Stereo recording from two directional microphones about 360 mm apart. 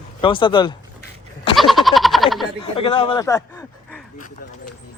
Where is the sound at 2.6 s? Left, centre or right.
Centre.